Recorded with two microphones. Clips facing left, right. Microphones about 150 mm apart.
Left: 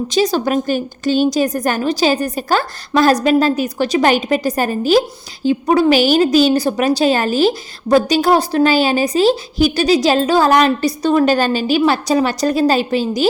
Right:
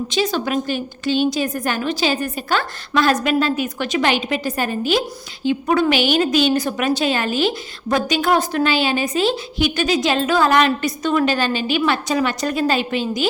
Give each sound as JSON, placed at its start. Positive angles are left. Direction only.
{"t": 0.1, "sound": "a woman's voice", "side_deg": 40}